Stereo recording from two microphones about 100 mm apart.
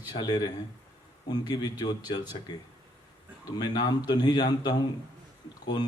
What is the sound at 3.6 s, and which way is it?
Speech, 45° left (ahead or behind).